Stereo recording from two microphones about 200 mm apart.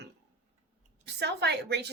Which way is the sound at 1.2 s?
55° right (ahead or behind).